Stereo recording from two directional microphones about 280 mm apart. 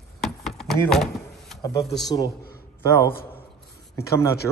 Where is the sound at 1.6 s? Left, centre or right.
Centre.